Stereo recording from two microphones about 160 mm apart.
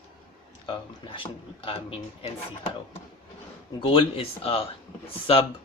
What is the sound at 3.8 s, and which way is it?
Speech, 35° left (ahead or behind).